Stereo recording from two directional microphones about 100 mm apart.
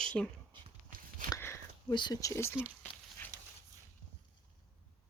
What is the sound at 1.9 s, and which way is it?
Speech, 50° left (ahead or behind).